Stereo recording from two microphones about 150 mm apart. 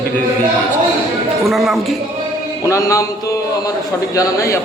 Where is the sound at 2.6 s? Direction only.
20° left (ahead or behind).